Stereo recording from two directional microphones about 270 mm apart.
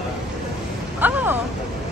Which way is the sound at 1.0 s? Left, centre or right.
Centre.